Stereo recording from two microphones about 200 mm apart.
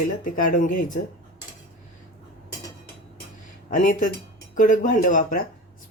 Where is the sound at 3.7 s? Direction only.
40° left (ahead or behind).